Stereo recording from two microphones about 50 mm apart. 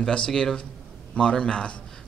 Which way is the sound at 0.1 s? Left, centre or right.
Centre.